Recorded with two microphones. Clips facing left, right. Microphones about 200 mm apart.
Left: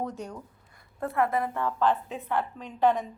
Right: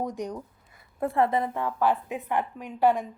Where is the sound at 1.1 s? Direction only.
25° right (ahead or behind).